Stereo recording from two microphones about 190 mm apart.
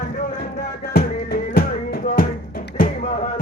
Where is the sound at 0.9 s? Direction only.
55° left (ahead or behind).